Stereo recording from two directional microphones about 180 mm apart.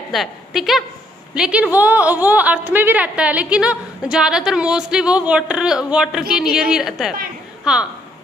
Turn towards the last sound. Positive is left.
turn(degrees=-5)  # may be behind; listen again after turning